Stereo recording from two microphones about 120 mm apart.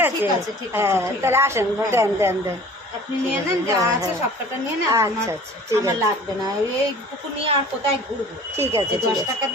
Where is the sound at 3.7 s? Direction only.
30° right (ahead or behind).